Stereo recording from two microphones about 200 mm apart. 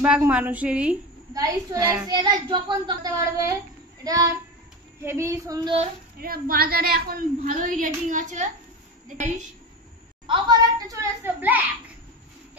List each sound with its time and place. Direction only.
0.0 s a woman's voice: 10° right (ahead or behind)
1.3 s a woman's voice: 15° right (ahead or behind)
6.1 s a woman's voice: 45° right (ahead or behind)
10.2 s a sound: 25° right (ahead or behind)